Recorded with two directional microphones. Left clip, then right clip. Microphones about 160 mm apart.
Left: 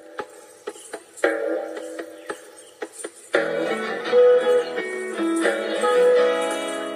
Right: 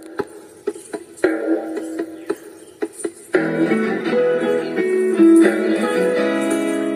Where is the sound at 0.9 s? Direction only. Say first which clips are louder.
Right 2 dB; 35° right (ahead or behind).